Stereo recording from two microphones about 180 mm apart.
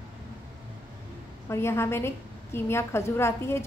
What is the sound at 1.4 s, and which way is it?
A woman's voice, 15° left (ahead or behind).